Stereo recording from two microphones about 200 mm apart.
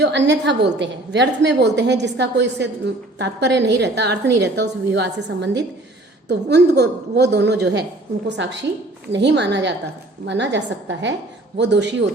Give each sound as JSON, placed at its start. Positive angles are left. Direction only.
{"t": 0.0, "sound": "a woman's voice", "side_deg": -60}